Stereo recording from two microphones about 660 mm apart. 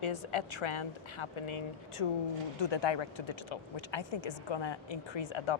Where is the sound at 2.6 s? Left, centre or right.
Left.